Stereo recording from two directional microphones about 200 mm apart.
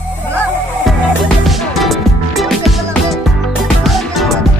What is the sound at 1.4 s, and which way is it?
Music, centre (ahead or behind).